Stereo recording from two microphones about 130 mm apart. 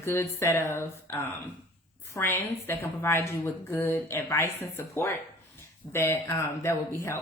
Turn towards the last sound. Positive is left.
turn(degrees=20)  # may be behind; listen again after turning